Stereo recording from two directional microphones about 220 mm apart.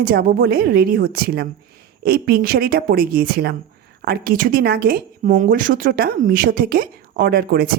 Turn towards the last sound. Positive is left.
turn(degrees=-45)  # may be behind; listen again after turning